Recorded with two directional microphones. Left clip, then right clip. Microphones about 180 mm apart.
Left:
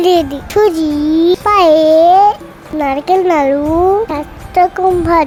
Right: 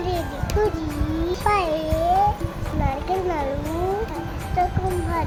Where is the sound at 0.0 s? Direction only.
55° left (ahead or behind).